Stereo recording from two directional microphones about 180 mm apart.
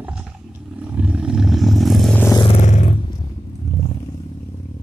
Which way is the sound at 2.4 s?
35° left (ahead or behind).